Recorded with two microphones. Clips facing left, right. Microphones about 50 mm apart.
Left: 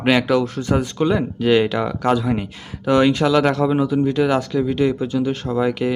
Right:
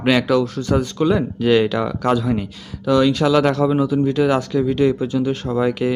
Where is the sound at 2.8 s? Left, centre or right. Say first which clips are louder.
Even; left.